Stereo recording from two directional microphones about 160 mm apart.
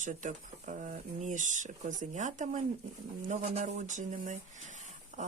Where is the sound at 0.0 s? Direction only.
50° right (ahead or behind).